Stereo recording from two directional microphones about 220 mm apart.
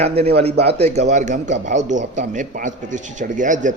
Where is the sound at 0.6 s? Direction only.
30° right (ahead or behind).